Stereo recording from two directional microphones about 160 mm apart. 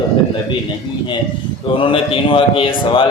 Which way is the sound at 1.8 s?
35° left (ahead or behind).